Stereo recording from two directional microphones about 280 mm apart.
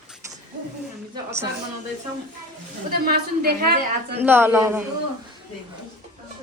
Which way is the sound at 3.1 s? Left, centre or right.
Right.